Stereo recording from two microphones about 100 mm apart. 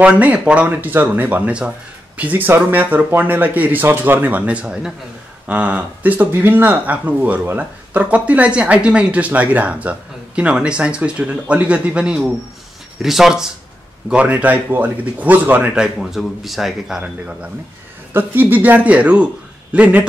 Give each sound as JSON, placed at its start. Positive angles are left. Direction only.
{"t": 0.0, "sound": "speech", "side_deg": -15}
{"t": 18.1, "sound": "speech", "side_deg": -20}